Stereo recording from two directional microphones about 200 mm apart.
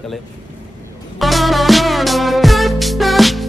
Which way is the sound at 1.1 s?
Centre (ahead or behind).